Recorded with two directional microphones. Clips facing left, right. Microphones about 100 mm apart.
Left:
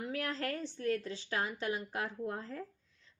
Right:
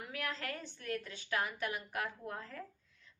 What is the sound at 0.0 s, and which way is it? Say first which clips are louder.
A woman's voice: left 5 dB; 35° left (ahead or behind).